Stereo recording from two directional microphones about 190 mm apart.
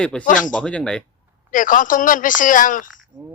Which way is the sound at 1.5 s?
45° left (ahead or behind).